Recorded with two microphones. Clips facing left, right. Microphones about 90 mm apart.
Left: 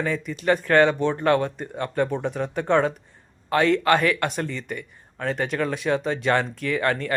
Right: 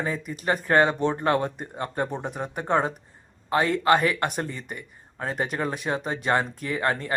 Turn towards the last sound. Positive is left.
turn(degrees=-25)  # may be behind; listen again after turning